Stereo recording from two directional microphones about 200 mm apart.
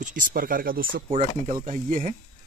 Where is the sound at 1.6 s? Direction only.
40° right (ahead or behind).